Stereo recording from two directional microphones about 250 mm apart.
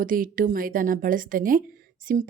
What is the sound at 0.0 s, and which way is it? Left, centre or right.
A woman's voice, right.